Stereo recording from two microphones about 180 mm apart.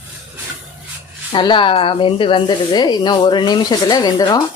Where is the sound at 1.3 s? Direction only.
25° left (ahead or behind).